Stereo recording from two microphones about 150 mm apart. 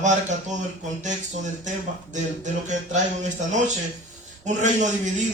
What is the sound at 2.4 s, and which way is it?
A man's voice, 55° right (ahead or behind).